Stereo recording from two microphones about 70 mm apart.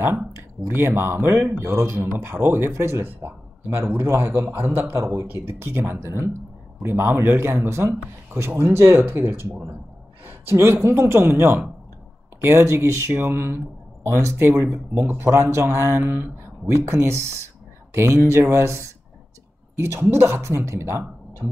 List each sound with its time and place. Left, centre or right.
0.7 s speech: right
10.5 s speech: right
16.6 s speech: right